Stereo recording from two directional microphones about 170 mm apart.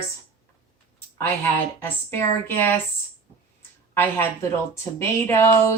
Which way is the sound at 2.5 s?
10° left (ahead or behind).